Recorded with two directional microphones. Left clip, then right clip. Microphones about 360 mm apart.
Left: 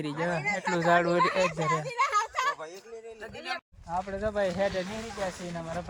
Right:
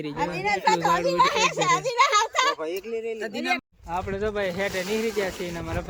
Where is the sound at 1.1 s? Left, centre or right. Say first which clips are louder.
Right 5 dB; right.